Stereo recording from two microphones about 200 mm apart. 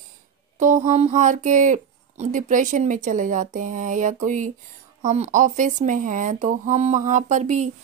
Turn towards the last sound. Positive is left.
turn(degrees=-35)  # may be behind; listen again after turning